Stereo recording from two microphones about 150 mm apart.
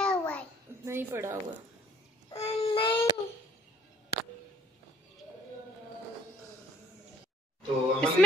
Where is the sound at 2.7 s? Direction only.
35° left (ahead or behind).